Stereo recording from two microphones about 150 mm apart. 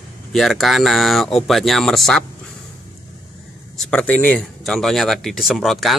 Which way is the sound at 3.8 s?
5° left (ahead or behind).